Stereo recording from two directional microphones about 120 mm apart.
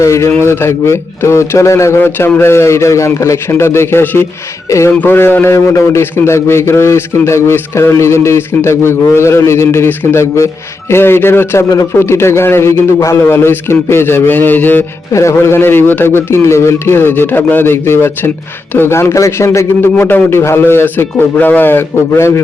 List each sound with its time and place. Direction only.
0.0 s a man's voice: 25° left (ahead or behind)